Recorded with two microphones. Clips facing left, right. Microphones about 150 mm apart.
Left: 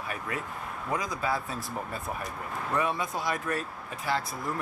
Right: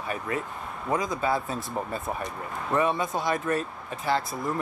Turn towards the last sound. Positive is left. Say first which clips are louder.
# right 4 dB
turn(degrees=0)  # may be behind; listen again after turning